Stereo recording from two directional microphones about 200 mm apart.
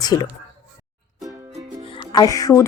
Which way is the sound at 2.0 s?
20° left (ahead or behind).